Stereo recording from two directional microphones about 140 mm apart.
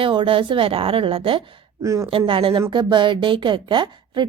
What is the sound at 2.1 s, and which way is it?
Speech, 40° right (ahead or behind).